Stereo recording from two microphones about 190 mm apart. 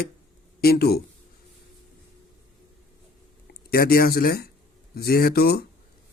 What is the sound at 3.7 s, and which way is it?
A man's voice, 50° left (ahead or behind).